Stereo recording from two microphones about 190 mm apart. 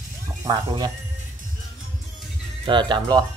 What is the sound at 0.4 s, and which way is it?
Speech, 20° right (ahead or behind).